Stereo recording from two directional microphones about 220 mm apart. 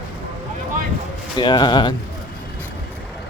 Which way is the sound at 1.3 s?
20° left (ahead or behind).